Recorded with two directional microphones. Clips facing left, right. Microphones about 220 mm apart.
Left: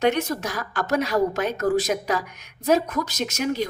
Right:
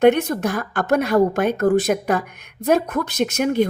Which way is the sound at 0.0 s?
55° right (ahead or behind).